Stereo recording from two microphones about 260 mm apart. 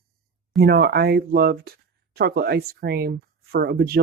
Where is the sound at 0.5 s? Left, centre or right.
Right.